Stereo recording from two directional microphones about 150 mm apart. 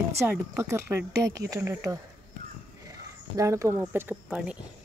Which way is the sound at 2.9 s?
20° right (ahead or behind).